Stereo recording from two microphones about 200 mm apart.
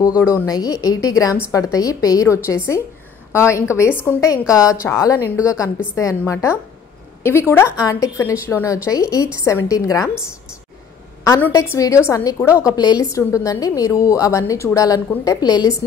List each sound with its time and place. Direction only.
0.3 s a woman's voice: 15° left (ahead or behind)
11.2 s a woman's voice: 15° left (ahead or behind)